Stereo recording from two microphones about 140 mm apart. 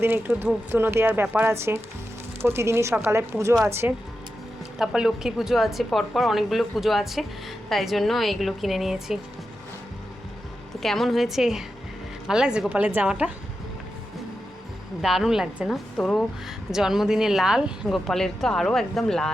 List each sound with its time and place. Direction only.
0.0 s speech: 15° right (ahead or behind)
4.8 s speech: 5° right (ahead or behind)
10.8 s speech: centre (ahead or behind)
15.0 s speech: centre (ahead or behind)